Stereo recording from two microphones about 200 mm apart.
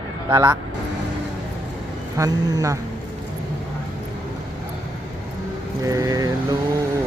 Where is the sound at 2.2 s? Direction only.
20° right (ahead or behind).